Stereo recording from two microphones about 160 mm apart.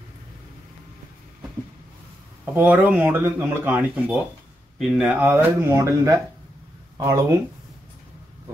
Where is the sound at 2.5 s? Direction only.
10° right (ahead or behind).